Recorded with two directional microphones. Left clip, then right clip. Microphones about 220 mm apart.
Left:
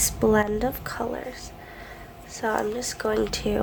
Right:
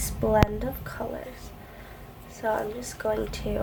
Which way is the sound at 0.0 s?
45° left (ahead or behind).